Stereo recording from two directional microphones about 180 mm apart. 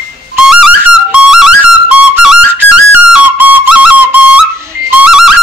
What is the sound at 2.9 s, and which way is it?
Whistle, 10° right (ahead or behind).